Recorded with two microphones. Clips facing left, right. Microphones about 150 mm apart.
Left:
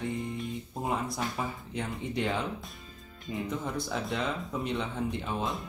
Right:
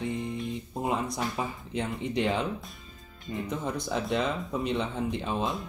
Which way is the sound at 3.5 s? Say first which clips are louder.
Right 3 dB; 20° right (ahead or behind).